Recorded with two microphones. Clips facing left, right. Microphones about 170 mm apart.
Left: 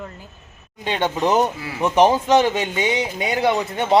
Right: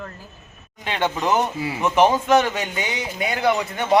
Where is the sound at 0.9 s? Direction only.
20° left (ahead or behind).